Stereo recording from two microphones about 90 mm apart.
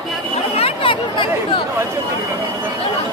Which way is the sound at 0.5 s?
85° left.